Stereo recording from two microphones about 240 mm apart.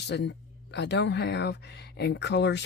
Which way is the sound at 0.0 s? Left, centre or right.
Left.